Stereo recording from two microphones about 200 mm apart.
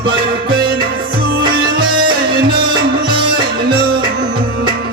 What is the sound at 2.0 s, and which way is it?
Music, 25° right (ahead or behind).